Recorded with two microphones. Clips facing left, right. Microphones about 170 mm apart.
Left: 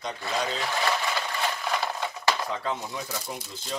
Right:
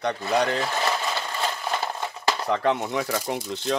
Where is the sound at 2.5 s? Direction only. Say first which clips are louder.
Right 8 dB; 70° right (ahead or behind).